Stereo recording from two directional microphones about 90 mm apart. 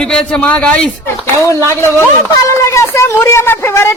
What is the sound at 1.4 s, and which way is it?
A woman's voice, 30° left (ahead or behind).